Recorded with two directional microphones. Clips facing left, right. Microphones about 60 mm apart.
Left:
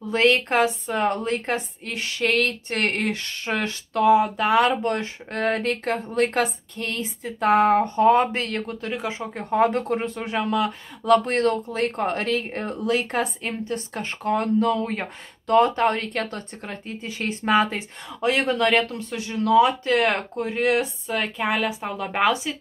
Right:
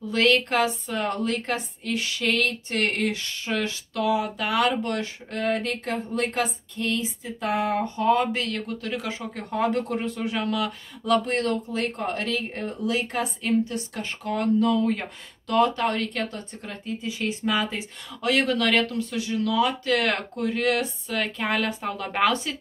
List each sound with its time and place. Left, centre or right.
0.1 s speech: left
5.4 s speech: left
12.6 s speech: left
18.2 s speech: left
21.4 s a woman's voice: centre